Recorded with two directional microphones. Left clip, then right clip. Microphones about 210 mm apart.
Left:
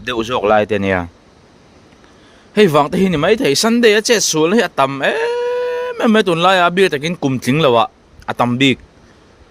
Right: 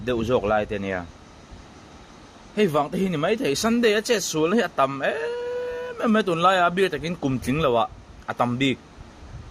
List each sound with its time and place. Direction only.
0.0 s speech: 55° left (ahead or behind)
2.6 s speech: 50° left (ahead or behind)